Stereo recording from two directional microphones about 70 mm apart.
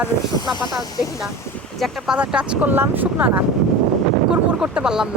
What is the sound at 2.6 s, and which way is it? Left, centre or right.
Speech, right.